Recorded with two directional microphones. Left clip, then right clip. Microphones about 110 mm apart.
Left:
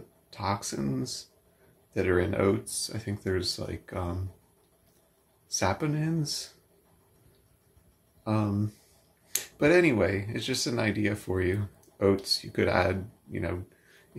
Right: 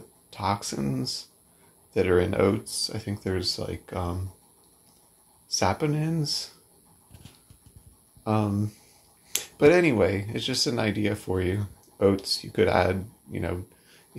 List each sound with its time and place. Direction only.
0.3 s speech: 20° right (ahead or behind)
5.5 s speech: 15° right (ahead or behind)
8.2 s speech: 20° right (ahead or behind)